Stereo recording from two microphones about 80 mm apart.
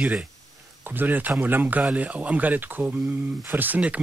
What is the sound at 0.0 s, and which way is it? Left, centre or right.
Speech, centre.